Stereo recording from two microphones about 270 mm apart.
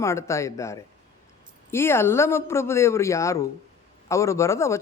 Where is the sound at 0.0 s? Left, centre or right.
Centre.